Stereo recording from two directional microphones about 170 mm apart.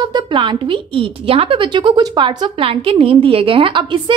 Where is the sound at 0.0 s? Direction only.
25° right (ahead or behind).